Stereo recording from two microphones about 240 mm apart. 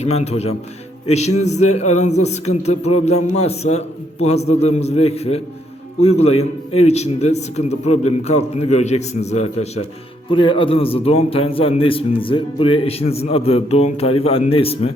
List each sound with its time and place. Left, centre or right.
0.0 s a man's voice: left